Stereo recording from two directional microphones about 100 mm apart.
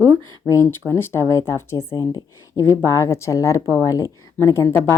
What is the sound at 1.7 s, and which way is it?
Speech, 45° left (ahead or behind).